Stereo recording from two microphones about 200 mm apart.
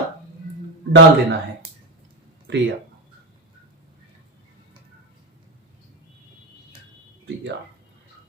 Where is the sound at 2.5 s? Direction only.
60° right (ahead or behind).